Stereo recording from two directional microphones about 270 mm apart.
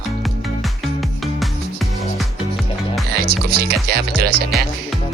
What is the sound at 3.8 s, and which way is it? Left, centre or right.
Speech, right.